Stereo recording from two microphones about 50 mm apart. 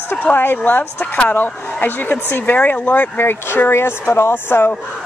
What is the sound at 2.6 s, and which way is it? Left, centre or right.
Speech, left.